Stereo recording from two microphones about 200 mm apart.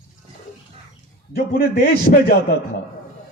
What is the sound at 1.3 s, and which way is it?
A man's voice, 50° left (ahead or behind).